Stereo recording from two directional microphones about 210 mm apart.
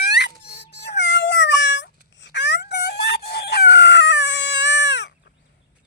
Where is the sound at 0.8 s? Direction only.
55° left (ahead or behind).